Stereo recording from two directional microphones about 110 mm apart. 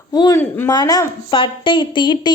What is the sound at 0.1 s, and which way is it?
Speech, 35° left (ahead or behind).